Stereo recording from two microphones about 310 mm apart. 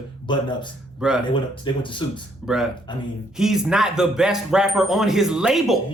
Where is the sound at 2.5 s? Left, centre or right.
Centre.